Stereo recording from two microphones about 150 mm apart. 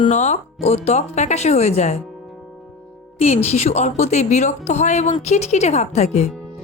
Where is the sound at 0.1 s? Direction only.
50° left (ahead or behind).